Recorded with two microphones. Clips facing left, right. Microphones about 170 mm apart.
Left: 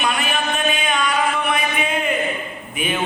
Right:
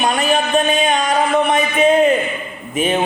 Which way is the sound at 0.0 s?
40° right (ahead or behind).